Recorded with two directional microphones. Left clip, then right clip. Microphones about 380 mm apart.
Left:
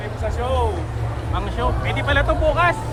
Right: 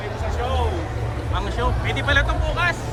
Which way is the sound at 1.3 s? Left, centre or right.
Centre.